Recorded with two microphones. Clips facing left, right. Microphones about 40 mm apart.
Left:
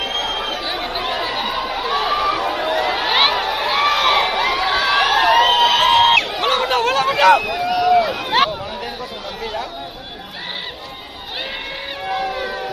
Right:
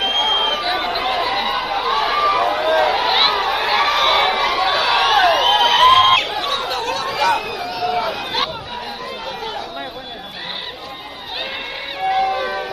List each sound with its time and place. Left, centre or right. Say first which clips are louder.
0.0 s chatter: right 5 dB; right
3.0 s chatter: even; left
3.7 s a sound: left 1 dB; right
5.5 s crowd: right 2 dB; right
6.4 s chatter: left 5 dB; left
12.0 s cat: right 5 dB; right